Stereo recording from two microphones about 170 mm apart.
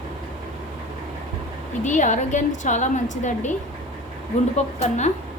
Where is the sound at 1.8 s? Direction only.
45° left (ahead or behind).